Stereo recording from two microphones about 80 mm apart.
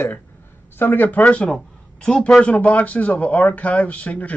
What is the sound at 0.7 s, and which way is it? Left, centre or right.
Speech, left.